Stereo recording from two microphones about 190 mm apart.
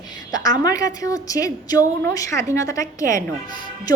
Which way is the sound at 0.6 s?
20° left (ahead or behind).